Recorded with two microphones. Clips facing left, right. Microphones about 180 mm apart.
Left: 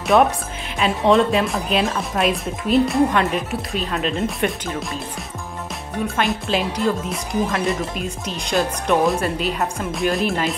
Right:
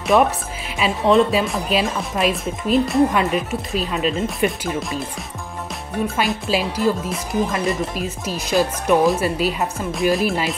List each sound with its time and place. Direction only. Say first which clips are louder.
0.0 s speech: even; centre (ahead or behind)
6.0 s speech: left 1 dB; centre (ahead or behind)